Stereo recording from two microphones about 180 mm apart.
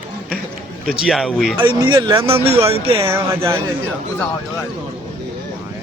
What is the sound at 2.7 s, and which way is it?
Speech, 30° right (ahead or behind).